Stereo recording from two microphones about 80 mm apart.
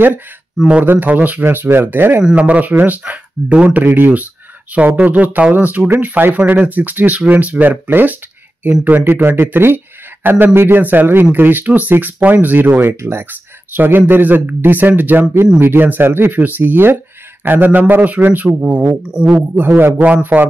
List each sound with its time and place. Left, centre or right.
0.6 s speech: centre
19.3 s speech: right